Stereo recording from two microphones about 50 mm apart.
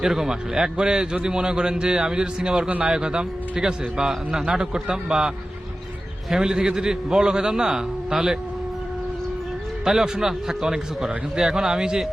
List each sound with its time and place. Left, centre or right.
0.0 s a man's voice: centre
6.3 s a man's voice: centre
9.8 s a man's voice: centre